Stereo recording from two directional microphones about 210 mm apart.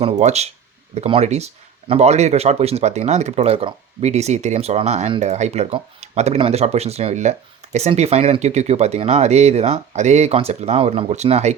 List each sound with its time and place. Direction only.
0.0 s speech: 30° right (ahead or behind)